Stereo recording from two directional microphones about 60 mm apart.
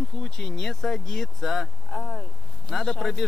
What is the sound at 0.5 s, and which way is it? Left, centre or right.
Speech, centre.